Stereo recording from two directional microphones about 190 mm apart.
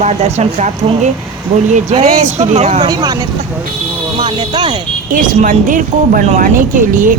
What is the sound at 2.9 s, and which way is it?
Speech, 20° right (ahead or behind).